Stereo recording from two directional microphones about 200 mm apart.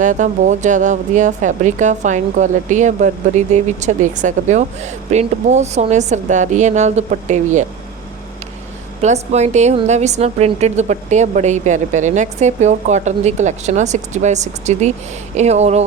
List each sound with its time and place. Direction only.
0.0 s a woman's voice: 40° right (ahead or behind)
9.0 s a woman's voice: 35° right (ahead or behind)